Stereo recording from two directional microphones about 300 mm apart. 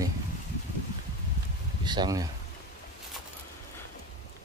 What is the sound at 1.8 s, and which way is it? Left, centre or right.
Speech, centre.